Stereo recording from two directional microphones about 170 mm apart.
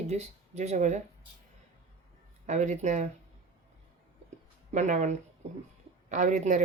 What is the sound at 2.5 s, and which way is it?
Speech, 45° right (ahead or behind).